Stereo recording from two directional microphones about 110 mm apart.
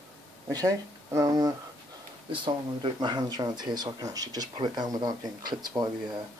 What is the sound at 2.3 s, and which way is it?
Speech, 45° right (ahead or behind).